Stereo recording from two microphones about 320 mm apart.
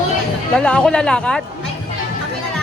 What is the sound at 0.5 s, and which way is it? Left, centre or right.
Speech, centre.